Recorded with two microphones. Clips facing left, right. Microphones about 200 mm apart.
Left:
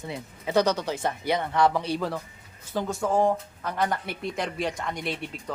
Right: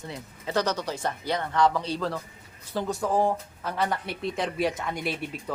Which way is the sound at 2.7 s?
5° right (ahead or behind).